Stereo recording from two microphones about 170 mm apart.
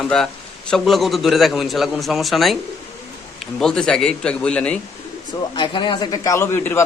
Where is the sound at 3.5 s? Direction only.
5° left (ahead or behind).